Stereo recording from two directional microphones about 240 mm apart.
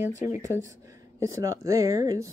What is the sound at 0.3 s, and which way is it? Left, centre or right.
Speech, centre.